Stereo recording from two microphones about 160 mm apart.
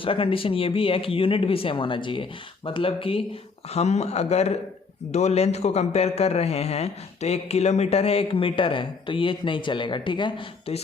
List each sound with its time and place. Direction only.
0.0 s a man's voice: 35° left (ahead or behind)